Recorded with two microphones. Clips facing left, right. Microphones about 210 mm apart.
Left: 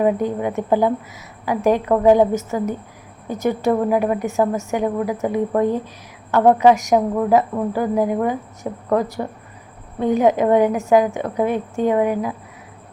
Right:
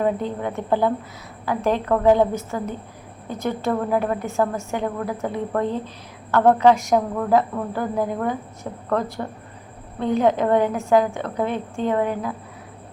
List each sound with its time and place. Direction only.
0.3 s a woman's voice: 15° left (ahead or behind)